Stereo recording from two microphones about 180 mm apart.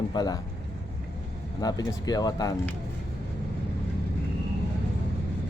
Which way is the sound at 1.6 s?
20° left (ahead or behind).